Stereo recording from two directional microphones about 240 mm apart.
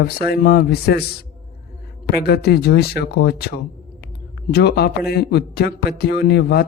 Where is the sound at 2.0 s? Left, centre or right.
Left.